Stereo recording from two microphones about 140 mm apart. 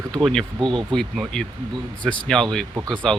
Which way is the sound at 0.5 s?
35° right (ahead or behind).